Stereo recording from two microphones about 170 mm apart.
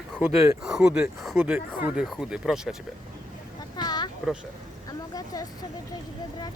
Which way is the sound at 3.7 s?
25° left (ahead or behind).